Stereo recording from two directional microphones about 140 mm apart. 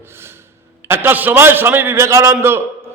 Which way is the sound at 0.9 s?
15° right (ahead or behind).